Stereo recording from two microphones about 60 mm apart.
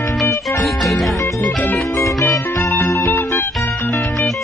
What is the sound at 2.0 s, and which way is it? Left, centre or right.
Music, left.